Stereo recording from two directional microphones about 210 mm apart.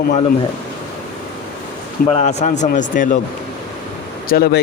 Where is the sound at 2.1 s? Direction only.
30° left (ahead or behind).